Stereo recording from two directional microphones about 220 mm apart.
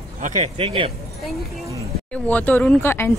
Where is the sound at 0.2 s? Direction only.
30° right (ahead or behind).